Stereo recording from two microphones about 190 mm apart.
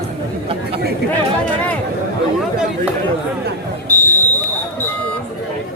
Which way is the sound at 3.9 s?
10° left (ahead or behind).